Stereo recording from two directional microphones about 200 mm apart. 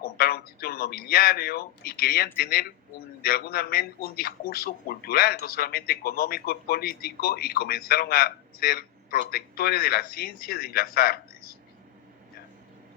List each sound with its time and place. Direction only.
0.0 s a man's voice: 50° left (ahead or behind)